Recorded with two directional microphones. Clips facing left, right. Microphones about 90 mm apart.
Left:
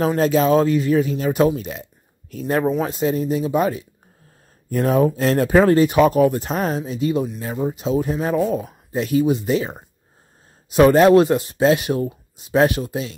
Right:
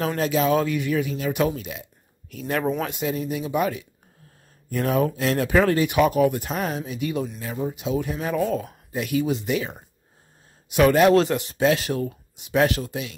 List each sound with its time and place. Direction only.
0.0 s speech: 30° left (ahead or behind)
8.5 s speech: 15° left (ahead or behind)
8.9 s speech: 30° left (ahead or behind)
9.2 s speech: 20° left (ahead or behind)
9.5 s speech: 30° left (ahead or behind)